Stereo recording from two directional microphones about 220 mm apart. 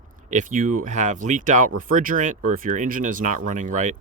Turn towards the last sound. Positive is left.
turn(degrees=-35)  # may be behind; listen again after turning